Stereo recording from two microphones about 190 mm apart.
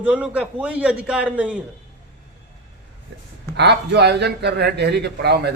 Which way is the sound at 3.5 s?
65° right (ahead or behind).